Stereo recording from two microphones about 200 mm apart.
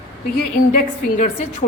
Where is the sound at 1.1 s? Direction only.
40° left (ahead or behind).